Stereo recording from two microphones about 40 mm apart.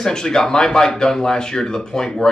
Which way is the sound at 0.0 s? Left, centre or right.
Centre.